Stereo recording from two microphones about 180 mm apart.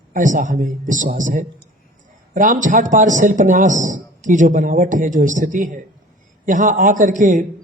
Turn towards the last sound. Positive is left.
turn(degrees=-45)  # may be behind; listen again after turning